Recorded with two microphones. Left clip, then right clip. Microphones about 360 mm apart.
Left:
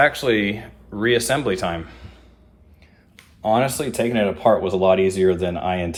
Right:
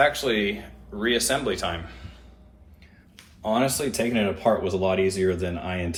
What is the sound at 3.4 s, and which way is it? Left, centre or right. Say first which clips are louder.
Speech: left 5 dB; left.